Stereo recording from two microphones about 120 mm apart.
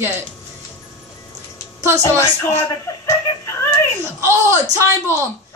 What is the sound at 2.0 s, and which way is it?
Speech, 20° left (ahead or behind).